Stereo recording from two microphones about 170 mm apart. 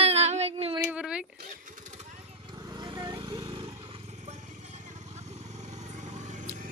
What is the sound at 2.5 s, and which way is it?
Vehicle, 25° right (ahead or behind).